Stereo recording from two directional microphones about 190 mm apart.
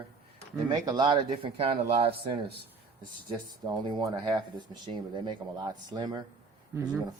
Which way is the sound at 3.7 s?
20° right (ahead or behind).